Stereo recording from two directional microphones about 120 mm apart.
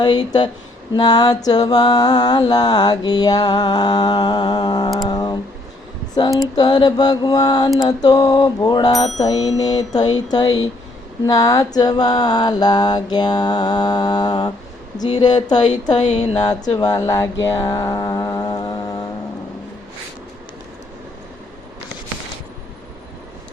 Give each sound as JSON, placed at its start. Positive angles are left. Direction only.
{"t": 0.0, "sound": "mantra", "side_deg": 35}
{"t": 6.6, "sound": "mantra", "side_deg": 35}